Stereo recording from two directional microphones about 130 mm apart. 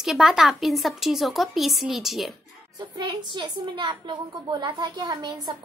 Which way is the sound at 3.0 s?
35° right (ahead or behind).